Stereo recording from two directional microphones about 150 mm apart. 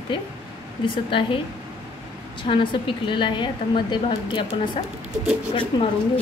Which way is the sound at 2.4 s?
35° left (ahead or behind).